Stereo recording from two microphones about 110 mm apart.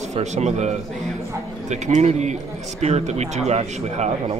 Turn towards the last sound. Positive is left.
turn(degrees=-85)